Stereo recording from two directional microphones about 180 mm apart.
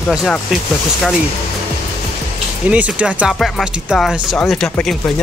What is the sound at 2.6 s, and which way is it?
Speech, 5° right (ahead or behind).